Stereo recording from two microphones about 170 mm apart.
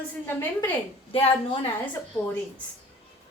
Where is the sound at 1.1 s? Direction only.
30° left (ahead or behind).